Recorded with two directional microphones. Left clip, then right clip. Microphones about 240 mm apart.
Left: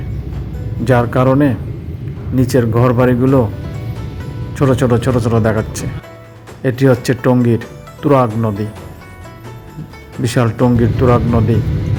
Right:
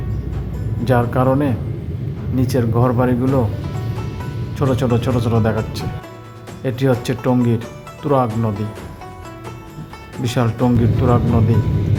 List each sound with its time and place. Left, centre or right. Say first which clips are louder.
0.9 s speech: left 4 dB; centre
4.5 s speech: left 5 dB; centre
10.2 s speech: left 4 dB; centre